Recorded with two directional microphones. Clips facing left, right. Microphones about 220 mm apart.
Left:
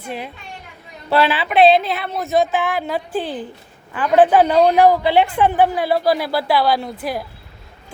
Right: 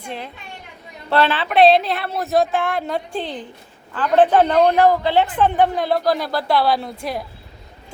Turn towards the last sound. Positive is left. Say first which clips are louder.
# left 1 dB
turn(degrees=0)  # may be behind; listen again after turning